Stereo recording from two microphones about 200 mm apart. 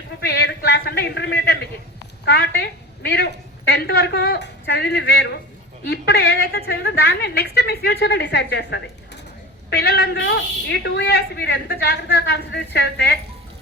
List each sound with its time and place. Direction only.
0.2 s a man's voice: 55° left (ahead or behind)